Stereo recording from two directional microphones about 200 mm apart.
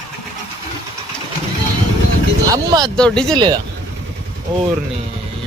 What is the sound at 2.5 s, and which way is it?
Speech, 20° right (ahead or behind).